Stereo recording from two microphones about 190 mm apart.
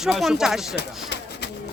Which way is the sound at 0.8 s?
60° left (ahead or behind).